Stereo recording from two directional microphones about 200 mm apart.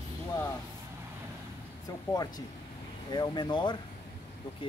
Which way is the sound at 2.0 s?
20° left (ahead or behind).